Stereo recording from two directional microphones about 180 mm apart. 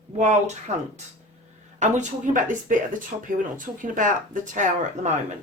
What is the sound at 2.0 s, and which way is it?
Speech, 45° right (ahead or behind).